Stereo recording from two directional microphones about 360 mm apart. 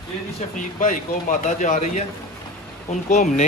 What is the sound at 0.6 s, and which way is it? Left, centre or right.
Speech, left.